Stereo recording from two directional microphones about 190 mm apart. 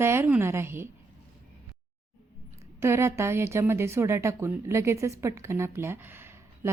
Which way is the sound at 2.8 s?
15° right (ahead or behind).